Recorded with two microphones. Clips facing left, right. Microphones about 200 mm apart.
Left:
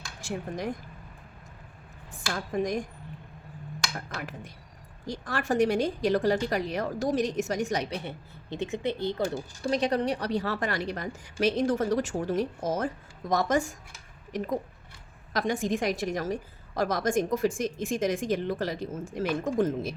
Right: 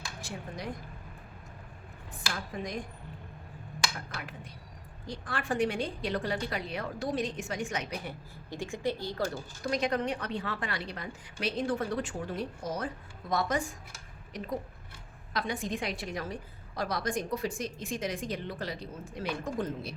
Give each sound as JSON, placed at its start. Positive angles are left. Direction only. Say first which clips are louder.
{"t": 0.2, "sound": "speech", "louder": "left 8 dB", "side_deg": 45}
{"t": 2.3, "sound": "a woman's voice", "louder": "left 9 dB", "side_deg": 45}
{"t": 3.9, "sound": "a woman's voice", "louder": "left 5 dB", "side_deg": 45}
{"t": 9.6, "sound": "a woman's voice", "louder": "left 4 dB", "side_deg": 30}
{"t": 15.3, "sound": "a woman's voice", "louder": "left 6 dB", "side_deg": 45}